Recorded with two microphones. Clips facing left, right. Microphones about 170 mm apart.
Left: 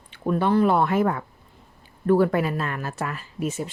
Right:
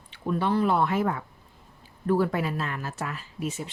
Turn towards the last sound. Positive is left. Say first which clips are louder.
# left 4 dB
turn(degrees=45)  # may be behind; listen again after turning